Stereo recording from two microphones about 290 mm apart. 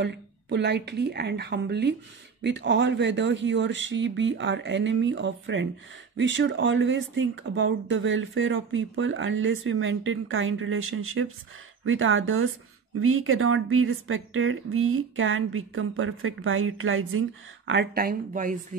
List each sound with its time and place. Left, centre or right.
0.0 s speech: right
17.6 s speech: right